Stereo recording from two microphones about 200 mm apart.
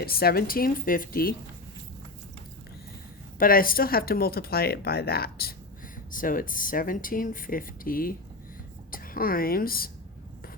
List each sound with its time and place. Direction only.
0.0 s speech: 50° left (ahead or behind)
3.3 s speech: 45° left (ahead or behind)